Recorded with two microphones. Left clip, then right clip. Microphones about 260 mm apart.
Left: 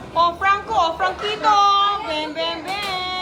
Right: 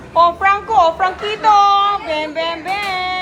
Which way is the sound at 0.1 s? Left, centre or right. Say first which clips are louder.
Right 5 dB; centre.